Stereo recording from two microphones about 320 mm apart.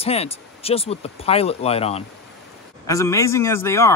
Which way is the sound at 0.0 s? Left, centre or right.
Centre.